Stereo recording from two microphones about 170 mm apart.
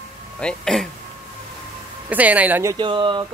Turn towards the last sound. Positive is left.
turn(degrees=-30)  # may be behind; listen again after turning